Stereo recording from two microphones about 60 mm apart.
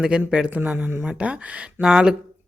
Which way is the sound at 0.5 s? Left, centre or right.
Right.